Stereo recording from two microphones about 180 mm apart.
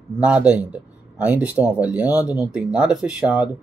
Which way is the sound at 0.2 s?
5° right (ahead or behind).